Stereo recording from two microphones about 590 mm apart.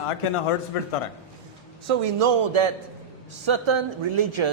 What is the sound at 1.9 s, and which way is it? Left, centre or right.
Speech, right.